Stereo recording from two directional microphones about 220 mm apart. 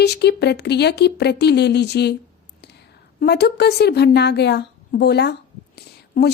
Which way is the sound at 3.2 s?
50° left (ahead or behind).